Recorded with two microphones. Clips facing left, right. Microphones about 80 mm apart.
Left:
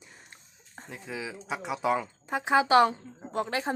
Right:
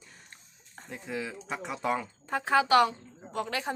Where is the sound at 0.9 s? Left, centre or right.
Centre.